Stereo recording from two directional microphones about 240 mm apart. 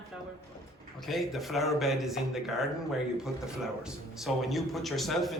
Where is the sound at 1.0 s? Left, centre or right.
Centre.